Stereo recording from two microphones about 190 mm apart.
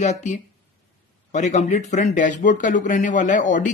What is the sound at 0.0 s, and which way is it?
A man's voice, 40° left (ahead or behind).